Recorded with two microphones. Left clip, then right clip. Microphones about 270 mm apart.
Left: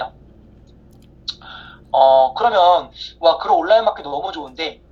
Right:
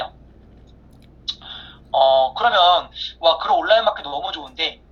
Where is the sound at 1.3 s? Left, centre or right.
Centre.